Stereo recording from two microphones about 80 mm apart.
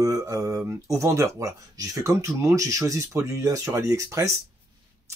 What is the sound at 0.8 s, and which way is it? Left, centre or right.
Speech, right.